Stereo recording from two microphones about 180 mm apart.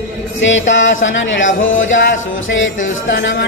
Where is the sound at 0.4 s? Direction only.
90° left.